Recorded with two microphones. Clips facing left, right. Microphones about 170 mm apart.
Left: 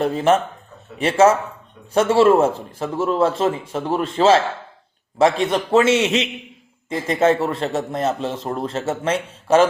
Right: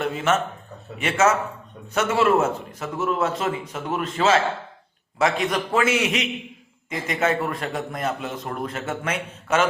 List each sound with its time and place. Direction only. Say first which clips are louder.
0.0 s a man's voice: left 5 dB; 35° left (ahead or behind)